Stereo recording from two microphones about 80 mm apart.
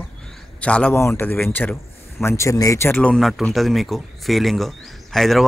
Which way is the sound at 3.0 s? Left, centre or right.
Centre.